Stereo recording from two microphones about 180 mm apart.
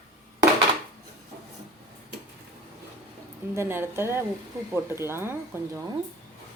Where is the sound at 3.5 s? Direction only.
15° right (ahead or behind).